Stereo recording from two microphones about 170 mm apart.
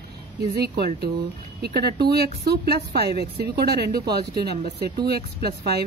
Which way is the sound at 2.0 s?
70° right (ahead or behind).